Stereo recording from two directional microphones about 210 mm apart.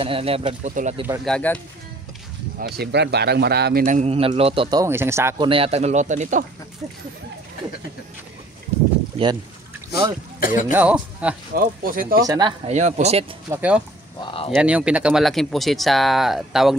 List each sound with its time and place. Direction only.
0.0 s speech: 25° right (ahead or behind)
1.2 s speech: 5° left (ahead or behind)
2.6 s speech: 50° right (ahead or behind); by 5.5 s 10° right (ahead or behind)
5.5 s speech: 30° right (ahead or behind)
10.4 s speech: 40° left (ahead or behind)
10.7 s speech: 5° right (ahead or behind)
11.5 s speech: 40° right (ahead or behind)
12.2 s speech: 20° right (ahead or behind)
13.5 s speech: 5° right (ahead or behind)
14.2 s speech: 25° left (ahead or behind)
14.5 s speech: 5° right (ahead or behind)